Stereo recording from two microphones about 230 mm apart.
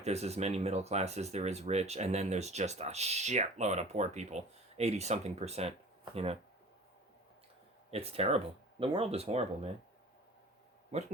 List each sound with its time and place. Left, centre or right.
0.0 s speech: right
7.9 s speech: right
10.9 s speech: right